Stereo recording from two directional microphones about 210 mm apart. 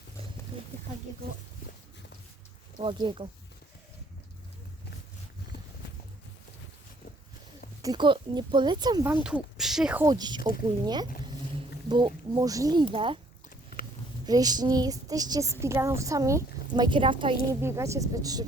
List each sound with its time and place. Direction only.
2.8 s speech: 25° right (ahead or behind)
7.8 s a woman's voice: 20° right (ahead or behind)
10.1 s speech: 20° right (ahead or behind)
11.9 s speech: 20° right (ahead or behind)
14.3 s a woman's voice: 20° right (ahead or behind)
17.5 s a woman's voice: 15° right (ahead or behind)